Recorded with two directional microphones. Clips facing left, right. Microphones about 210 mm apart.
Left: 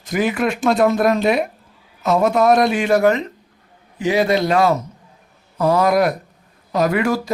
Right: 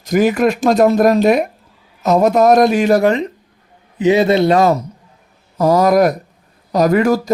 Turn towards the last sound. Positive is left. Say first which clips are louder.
# right 5 dB
turn(degrees=-40)  # may be behind; listen again after turning